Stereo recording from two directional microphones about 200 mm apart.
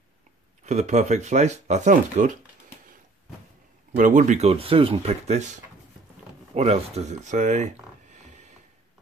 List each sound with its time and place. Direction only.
0.7 s speech: 35° right (ahead or behind)
3.9 s speech: 40° right (ahead or behind)